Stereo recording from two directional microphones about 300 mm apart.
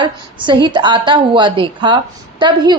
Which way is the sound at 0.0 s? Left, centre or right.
Centre.